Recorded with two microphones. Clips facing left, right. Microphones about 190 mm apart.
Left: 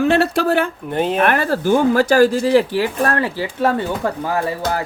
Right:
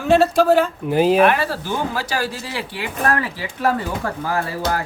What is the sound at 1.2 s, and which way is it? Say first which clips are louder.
Speech: left 1 dB; 50° left (ahead or behind).